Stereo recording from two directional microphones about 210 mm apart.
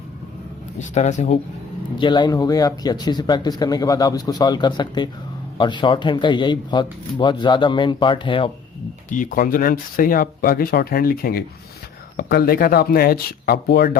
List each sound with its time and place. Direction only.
0.8 s speech: 35° left (ahead or behind)
2.0 s speech: 20° left (ahead or behind)
9.0 s speech: 40° left (ahead or behind)